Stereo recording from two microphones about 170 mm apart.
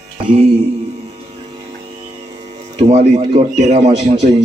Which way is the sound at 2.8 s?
40° right (ahead or behind).